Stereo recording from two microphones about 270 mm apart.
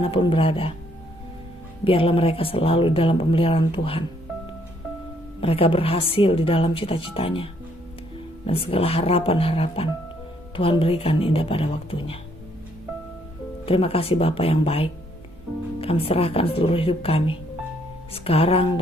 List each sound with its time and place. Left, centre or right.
0.0 s a woman's voice: centre
1.8 s a woman's voice: left
5.4 s a woman's voice: left
13.7 s a woman's voice: left